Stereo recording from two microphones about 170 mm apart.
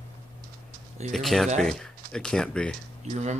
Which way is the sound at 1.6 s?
5° left (ahead or behind).